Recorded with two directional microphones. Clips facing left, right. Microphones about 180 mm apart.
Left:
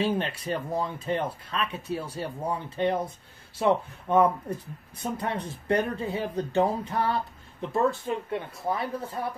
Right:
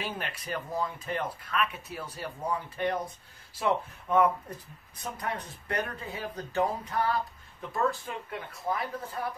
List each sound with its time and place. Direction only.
0.0 s speech: 30° left (ahead or behind)